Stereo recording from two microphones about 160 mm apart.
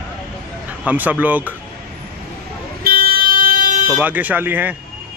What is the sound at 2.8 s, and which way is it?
Vehicle, 65° right (ahead or behind).